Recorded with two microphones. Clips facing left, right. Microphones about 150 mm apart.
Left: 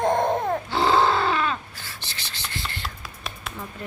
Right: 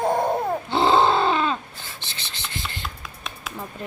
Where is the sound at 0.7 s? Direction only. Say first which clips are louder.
Right 3 dB; 25° right (ahead or behind).